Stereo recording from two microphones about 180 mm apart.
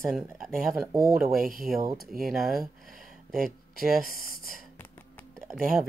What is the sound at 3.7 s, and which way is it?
Speech, 55° left (ahead or behind).